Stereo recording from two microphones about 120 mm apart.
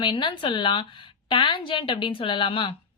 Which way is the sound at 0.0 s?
40° left (ahead or behind).